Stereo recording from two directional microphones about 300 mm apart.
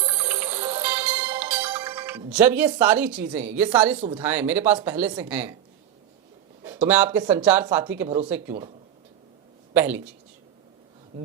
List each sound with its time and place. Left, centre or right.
0.0 s music: centre
3.5 s speech: centre
3.9 s speech: centre
4.2 s speech: centre
6.7 s speech: centre
8.0 s speech: centre
9.7 s speech: centre